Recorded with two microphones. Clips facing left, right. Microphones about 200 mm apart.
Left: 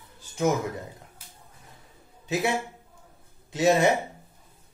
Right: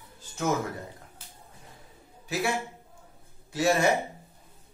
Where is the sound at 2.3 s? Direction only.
20° left (ahead or behind).